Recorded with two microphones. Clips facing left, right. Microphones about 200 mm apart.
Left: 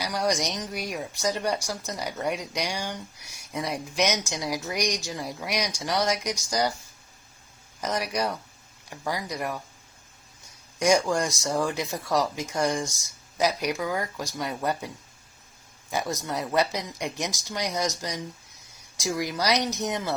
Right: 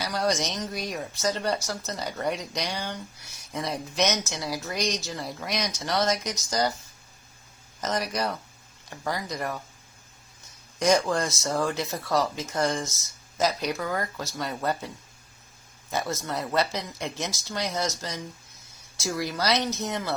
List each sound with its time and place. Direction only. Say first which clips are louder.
0.0 s speech: even; 15° left (ahead or behind)
7.8 s speech: even; 10° left (ahead or behind)
10.8 s speech: left 1 dB; 10° left (ahead or behind)
15.9 s speech: even; 15° left (ahead or behind)